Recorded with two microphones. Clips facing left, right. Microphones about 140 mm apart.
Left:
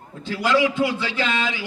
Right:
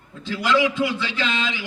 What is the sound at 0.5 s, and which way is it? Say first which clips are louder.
Speech: even; 20° right (ahead or behind).